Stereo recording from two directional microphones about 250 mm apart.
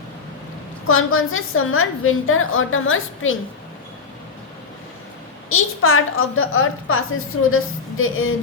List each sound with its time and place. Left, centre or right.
0.9 s a woman's voice: left
5.5 s a woman's voice: left